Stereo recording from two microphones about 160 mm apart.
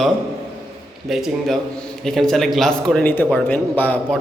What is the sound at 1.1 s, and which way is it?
Speech, centre (ahead or behind).